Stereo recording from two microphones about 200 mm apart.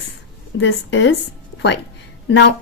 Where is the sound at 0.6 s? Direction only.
65° left (ahead or behind).